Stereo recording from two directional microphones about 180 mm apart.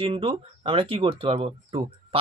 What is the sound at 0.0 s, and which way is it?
Speech, 30° right (ahead or behind).